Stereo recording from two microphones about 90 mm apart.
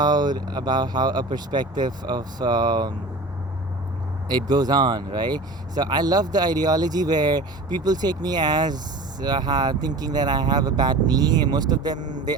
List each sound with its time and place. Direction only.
0.0 s speech: 50° right (ahead or behind)
4.3 s speech: 50° right (ahead or behind)